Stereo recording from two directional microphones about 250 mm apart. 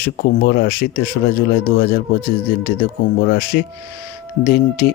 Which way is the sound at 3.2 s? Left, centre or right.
Left.